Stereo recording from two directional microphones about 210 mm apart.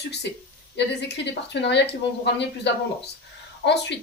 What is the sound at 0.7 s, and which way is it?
Speech, 55° left (ahead or behind).